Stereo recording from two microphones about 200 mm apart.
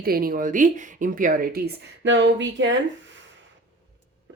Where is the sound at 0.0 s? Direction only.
50° right (ahead or behind); by 2.7 s 65° right (ahead or behind).